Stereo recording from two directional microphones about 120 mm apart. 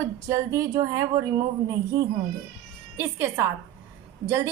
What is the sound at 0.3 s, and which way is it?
Speech, 25° right (ahead or behind).